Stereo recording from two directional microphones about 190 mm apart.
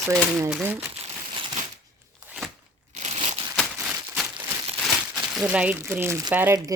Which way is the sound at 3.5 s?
Centre (ahead or behind).